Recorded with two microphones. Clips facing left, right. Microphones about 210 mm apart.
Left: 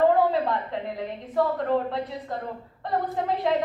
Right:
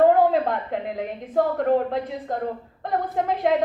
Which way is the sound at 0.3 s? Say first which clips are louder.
Right 3 dB; 50° right (ahead or behind).